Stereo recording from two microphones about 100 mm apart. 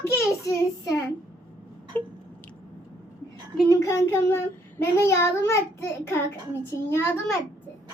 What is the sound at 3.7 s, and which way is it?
Child singing, 30° left (ahead or behind).